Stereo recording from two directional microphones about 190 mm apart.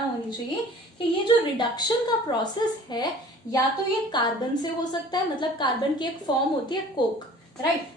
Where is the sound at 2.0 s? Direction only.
20° left (ahead or behind).